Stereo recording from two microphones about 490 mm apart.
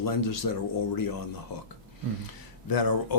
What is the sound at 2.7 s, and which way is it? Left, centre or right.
Speech, left.